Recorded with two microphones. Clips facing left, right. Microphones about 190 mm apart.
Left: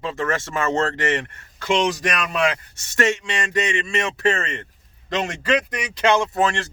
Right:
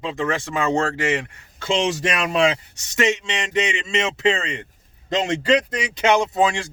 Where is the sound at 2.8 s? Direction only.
15° right (ahead or behind).